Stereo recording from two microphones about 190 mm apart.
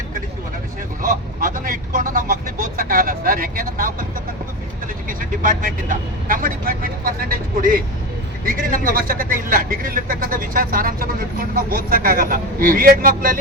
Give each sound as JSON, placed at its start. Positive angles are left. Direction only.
{"t": 1.0, "sound": "speech", "side_deg": -45}
{"t": 5.0, "sound": "speech", "side_deg": -45}